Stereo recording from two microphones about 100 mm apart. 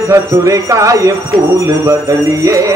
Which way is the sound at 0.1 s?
35° right (ahead or behind).